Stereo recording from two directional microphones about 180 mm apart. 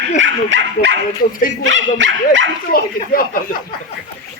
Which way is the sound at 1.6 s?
90° right.